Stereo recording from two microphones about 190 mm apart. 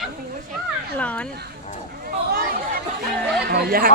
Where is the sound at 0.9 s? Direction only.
5° left (ahead or behind).